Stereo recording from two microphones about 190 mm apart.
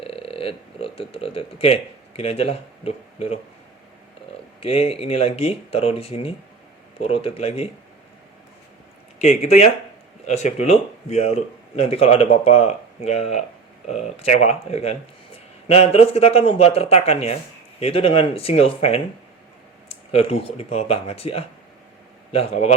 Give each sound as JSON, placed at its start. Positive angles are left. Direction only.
{"t": 0.0, "sound": "speech", "side_deg": 30}
{"t": 4.6, "sound": "speech", "side_deg": 30}
{"t": 9.1, "sound": "a man's voice", "side_deg": 35}